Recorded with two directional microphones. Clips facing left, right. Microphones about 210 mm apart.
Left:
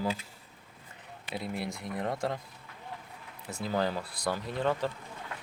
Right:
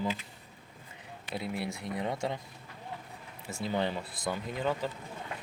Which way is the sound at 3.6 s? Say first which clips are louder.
Left 1 dB; centre (ahead or behind).